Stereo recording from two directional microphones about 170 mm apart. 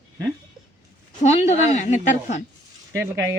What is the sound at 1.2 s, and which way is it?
Speech, 40° left (ahead or behind).